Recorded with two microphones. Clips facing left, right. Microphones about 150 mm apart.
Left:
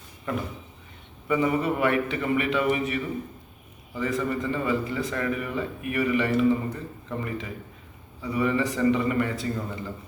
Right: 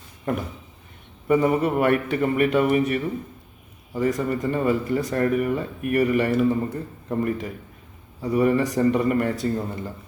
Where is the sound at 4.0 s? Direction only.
40° right (ahead or behind).